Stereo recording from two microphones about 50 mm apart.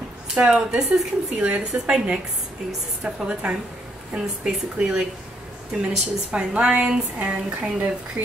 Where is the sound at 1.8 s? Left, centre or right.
Centre.